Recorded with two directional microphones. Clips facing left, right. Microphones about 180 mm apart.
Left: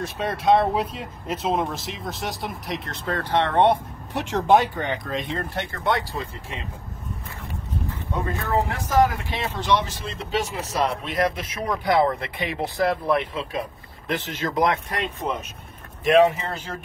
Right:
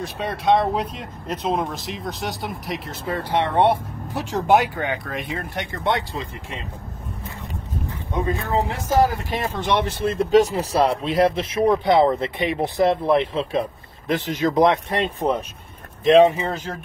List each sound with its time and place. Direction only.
0.0 s speech: centre (ahead or behind)
3.1 s speech: 10° right (ahead or behind)
8.1 s speech: 15° right (ahead or behind)
8.9 s speech: 35° right (ahead or behind)
9.6 s speech: 60° right (ahead or behind)
10.3 s speech: 35° right (ahead or behind)
14.0 s speech: 20° right (ahead or behind); by 15.4 s 35° right (ahead or behind)
16.1 s speech: 25° right (ahead or behind)